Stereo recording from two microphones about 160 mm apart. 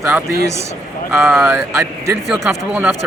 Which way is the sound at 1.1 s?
15° right (ahead or behind).